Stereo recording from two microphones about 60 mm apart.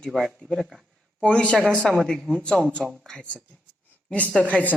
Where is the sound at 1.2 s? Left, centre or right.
Centre.